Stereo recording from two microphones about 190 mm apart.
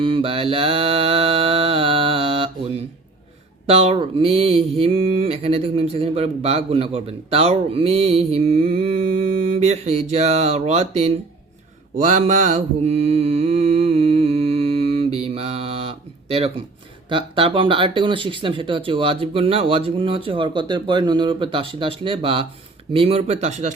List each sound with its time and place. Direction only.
0.0 s mantra: 30° right (ahead or behind)
3.7 s mantra: 30° right (ahead or behind)
17.1 s speech: 25° right (ahead or behind)
22.9 s mantra: 30° right (ahead or behind)